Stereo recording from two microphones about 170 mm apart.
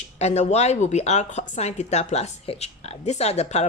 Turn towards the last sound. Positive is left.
turn(degrees=40)  # may be behind; listen again after turning